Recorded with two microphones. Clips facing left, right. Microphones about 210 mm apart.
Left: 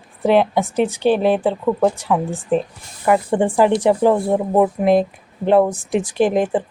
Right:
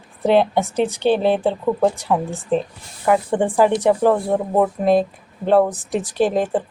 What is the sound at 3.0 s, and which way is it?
Speech, centre (ahead or behind).